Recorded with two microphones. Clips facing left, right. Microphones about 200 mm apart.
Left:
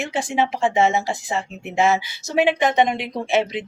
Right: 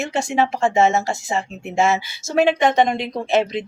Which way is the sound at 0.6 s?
45° right (ahead or behind).